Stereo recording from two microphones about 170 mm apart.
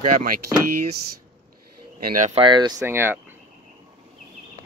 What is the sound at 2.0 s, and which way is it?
Speech, 55° right (ahead or behind).